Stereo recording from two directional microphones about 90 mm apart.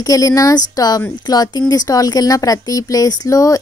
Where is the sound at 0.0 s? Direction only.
40° left (ahead or behind).